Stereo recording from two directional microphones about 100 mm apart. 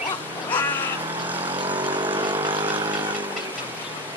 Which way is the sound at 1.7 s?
55° right (ahead or behind).